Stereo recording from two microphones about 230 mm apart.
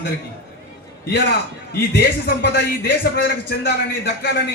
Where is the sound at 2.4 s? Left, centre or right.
Left.